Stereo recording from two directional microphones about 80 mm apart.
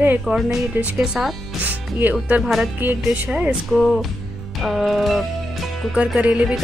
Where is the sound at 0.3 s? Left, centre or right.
Centre.